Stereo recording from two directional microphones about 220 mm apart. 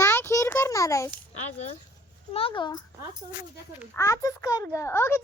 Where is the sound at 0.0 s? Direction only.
10° left (ahead or behind).